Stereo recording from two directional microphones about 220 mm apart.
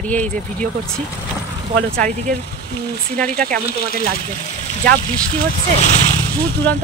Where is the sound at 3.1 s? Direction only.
5° left (ahead or behind).